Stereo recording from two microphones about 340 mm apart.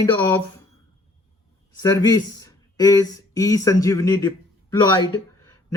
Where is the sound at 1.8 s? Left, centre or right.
Centre.